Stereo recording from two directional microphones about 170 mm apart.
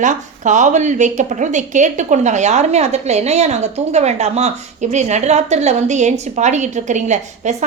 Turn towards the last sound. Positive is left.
turn(degrees=-45)  # may be behind; listen again after turning